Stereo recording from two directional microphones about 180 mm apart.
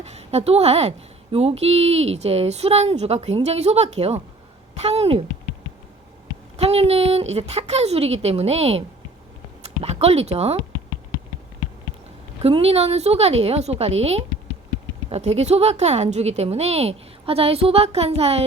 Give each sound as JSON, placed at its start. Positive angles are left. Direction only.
{"t": 0.0, "sound": "speech", "side_deg": -35}
{"t": 6.6, "sound": "speech", "side_deg": -35}
{"t": 12.4, "sound": "speech", "side_deg": -35}